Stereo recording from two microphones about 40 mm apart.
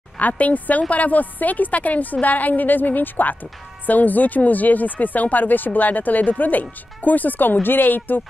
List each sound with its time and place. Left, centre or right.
0.2 s a woman's voice: left